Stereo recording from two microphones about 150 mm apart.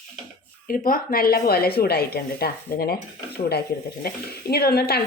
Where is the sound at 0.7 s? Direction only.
70° left (ahead or behind).